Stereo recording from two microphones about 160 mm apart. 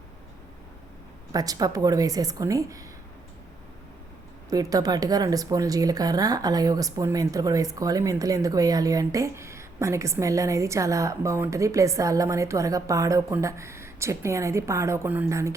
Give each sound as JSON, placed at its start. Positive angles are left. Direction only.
{"t": 1.3, "sound": "speech", "side_deg": -25}
{"t": 4.4, "sound": "speech", "side_deg": -20}